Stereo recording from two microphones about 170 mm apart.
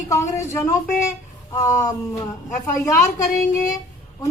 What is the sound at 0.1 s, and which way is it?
Speech, 15° left (ahead or behind).